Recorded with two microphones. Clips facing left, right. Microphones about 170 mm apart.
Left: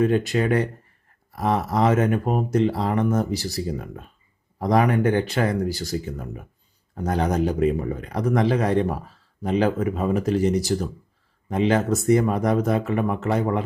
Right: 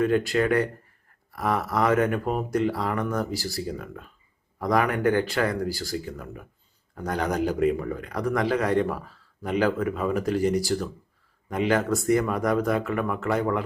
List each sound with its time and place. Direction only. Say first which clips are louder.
0.0 s a man's voice: left 2 dB; 20° left (ahead or behind)